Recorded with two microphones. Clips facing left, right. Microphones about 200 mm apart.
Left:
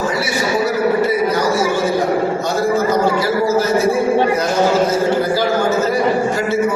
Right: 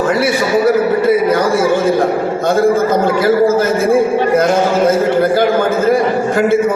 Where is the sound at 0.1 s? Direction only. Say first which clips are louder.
Right 7 dB; 55° right (ahead or behind).